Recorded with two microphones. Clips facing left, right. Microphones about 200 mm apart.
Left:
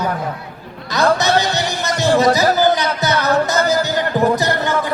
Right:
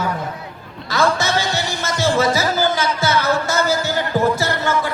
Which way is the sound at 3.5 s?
15° left (ahead or behind).